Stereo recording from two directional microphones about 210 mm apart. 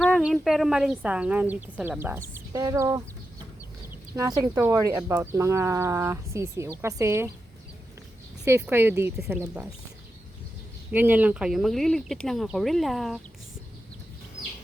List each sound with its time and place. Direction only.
0.0 s speech: centre (ahead or behind)
4.1 s speech: 15° right (ahead or behind)
8.4 s speech: 10° right (ahead or behind)
10.9 s speech: 10° right (ahead or behind)